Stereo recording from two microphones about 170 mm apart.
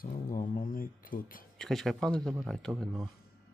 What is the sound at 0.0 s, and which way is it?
Speech, 55° left (ahead or behind).